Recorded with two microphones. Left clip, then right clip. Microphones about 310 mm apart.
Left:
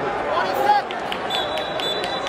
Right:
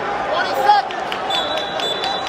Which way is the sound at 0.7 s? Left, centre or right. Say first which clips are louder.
Right 5 dB; right.